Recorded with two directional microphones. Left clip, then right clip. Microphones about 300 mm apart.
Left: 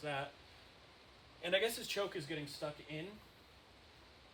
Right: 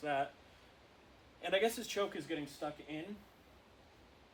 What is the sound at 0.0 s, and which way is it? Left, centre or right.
Speech, centre.